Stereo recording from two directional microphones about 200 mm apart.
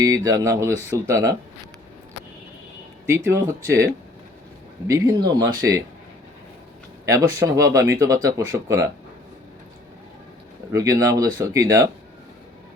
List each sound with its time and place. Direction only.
0.0 s speech: 15° right (ahead or behind)
3.2 s speech: 15° right (ahead or behind)
4.9 s speech: 15° right (ahead or behind)
7.0 s speech: 15° right (ahead or behind)
10.7 s speech: 15° right (ahead or behind)